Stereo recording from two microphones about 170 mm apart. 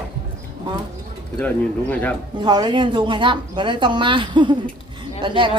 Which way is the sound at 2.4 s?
25° right (ahead or behind).